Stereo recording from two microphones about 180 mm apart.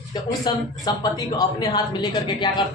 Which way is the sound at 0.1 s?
20° left (ahead or behind).